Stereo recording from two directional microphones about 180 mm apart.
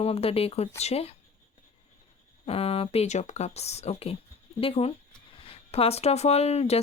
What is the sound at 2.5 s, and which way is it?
Speech, 30° left (ahead or behind).